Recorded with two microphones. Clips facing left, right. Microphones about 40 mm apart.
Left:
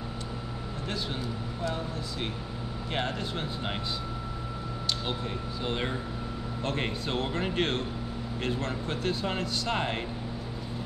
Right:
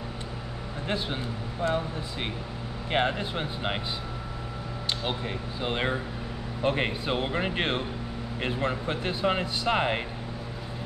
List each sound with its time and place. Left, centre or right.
0.8 s speech: right
5.0 s speech: right